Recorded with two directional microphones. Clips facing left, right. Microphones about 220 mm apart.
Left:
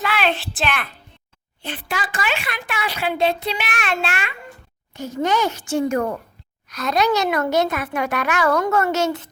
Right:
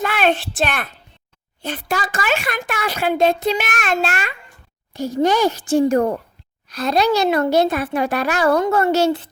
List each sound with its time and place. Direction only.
0.0 s a woman's voice: 50° right (ahead or behind); by 9.3 s 30° right (ahead or behind)